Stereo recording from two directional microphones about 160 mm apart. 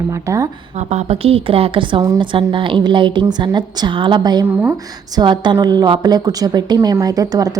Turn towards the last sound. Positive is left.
turn(degrees=-25)  # may be behind; listen again after turning